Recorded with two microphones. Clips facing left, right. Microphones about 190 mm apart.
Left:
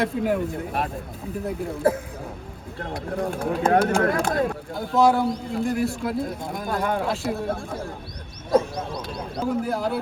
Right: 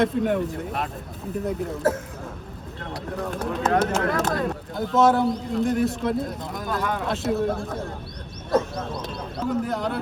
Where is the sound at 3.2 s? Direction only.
50° left (ahead or behind).